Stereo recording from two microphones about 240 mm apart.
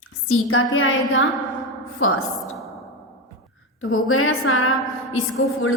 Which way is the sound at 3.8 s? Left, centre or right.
Left.